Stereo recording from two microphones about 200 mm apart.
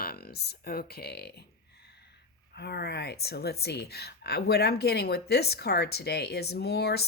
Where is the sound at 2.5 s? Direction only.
55° left (ahead or behind).